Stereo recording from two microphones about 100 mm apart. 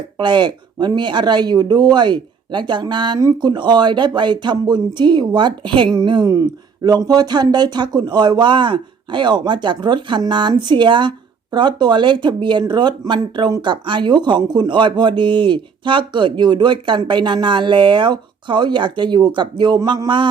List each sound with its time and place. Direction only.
0.2 s speech: 50° right (ahead or behind)
6.8 s speech: 40° right (ahead or behind)